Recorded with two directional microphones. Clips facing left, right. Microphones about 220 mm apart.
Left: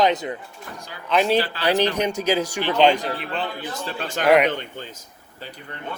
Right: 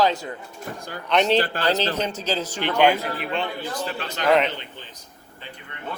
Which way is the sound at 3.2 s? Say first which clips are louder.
Right 1 dB; centre (ahead or behind).